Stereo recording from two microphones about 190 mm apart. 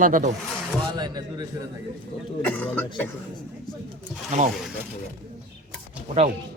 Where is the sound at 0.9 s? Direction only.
20° right (ahead or behind).